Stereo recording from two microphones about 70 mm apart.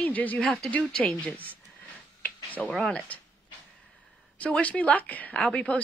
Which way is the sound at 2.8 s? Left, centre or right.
Centre.